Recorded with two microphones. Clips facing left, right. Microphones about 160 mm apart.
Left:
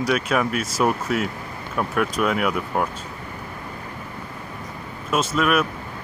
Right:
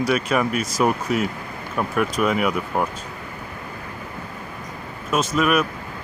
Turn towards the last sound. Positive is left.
turn(degrees=0)  # may be behind; listen again after turning